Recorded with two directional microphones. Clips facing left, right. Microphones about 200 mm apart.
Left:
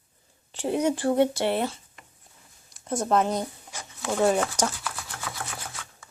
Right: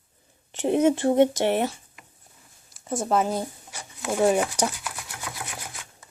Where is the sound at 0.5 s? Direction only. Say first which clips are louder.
Right 4 dB; 20° right (ahead or behind).